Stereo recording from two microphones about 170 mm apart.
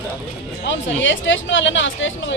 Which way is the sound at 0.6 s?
90° left.